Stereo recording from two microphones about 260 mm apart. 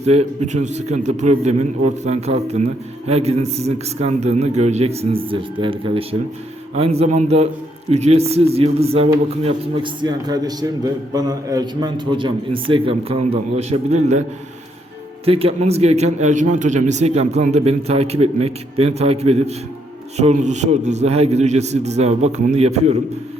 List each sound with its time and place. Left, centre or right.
0.0 s a man's voice: right